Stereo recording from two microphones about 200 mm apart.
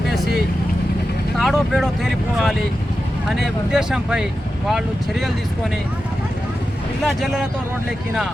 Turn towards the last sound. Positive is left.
turn(degrees=0)  # may be behind; listen again after turning